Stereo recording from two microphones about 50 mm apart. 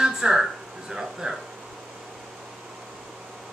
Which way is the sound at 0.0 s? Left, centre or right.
Centre.